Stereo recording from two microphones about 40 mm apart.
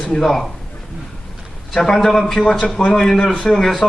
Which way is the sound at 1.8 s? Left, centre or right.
Centre.